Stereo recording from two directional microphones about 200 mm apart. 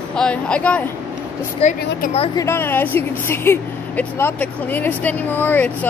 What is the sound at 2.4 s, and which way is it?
A woman's voice, 10° left (ahead or behind).